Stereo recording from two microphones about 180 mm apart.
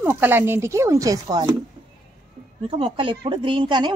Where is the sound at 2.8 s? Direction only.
30° right (ahead or behind).